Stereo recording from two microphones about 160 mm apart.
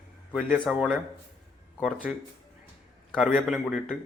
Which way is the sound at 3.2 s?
5° right (ahead or behind).